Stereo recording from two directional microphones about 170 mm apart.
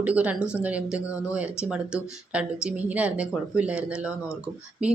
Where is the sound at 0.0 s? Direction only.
10° right (ahead or behind).